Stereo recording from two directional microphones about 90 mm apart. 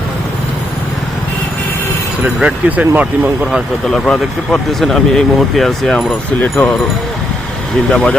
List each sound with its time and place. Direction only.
2.2 s speech: 15° right (ahead or behind)
3.8 s speech: 10° left (ahead or behind)
6.1 s speech: 20° left (ahead or behind)
7.9 s speech: 5° left (ahead or behind)